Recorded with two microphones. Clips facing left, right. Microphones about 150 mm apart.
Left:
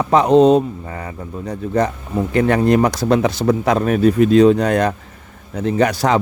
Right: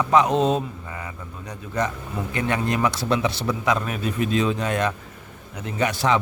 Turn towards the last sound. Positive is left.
turn(degrees=40)  # may be behind; listen again after turning